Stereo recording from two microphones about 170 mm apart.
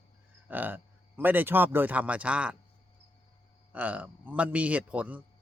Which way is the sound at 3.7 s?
10° right (ahead or behind).